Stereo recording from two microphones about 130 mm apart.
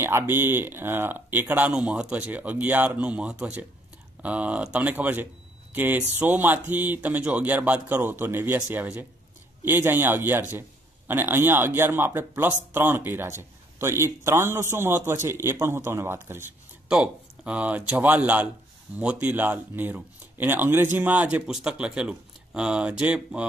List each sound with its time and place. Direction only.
0.0 s speech: 15° right (ahead or behind)